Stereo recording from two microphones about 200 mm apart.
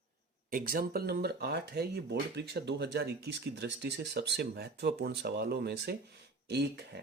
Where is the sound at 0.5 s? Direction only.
50° right (ahead or behind).